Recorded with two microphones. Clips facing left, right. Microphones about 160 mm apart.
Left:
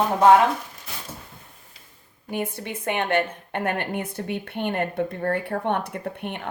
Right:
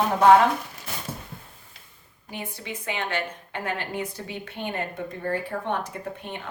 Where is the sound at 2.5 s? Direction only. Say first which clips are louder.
Left 5 dB; 55° left (ahead or behind).